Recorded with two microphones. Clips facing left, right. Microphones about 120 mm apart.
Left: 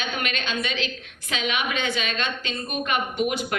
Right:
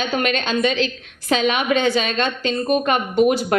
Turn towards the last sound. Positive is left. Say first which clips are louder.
# right 9 dB
turn(degrees=-35)  # may be behind; listen again after turning